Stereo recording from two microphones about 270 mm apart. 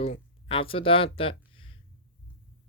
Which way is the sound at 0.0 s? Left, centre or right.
Left.